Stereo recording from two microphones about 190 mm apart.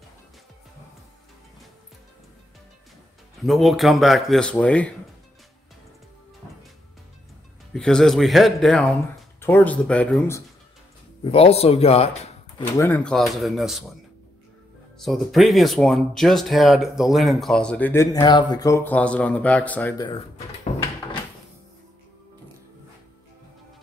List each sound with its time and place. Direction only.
3.4 s speech: centre (ahead or behind)
7.7 s speech: centre (ahead or behind)
11.2 s speech: 30° left (ahead or behind)
12.7 s speech: 10° left (ahead or behind)
15.0 s speech: centre (ahead or behind)
20.1 s drawer open or close: 30° left (ahead or behind)